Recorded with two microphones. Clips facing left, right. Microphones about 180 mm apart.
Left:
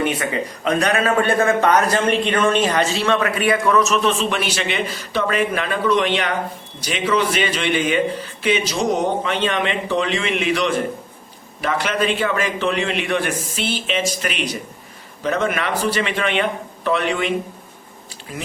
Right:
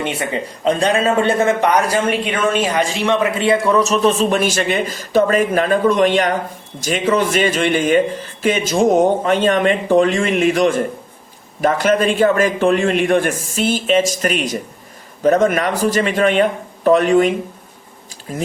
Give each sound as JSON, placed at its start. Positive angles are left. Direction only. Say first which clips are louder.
{"t": 0.0, "sound": "a man's voice", "louder": "even", "side_deg": -25}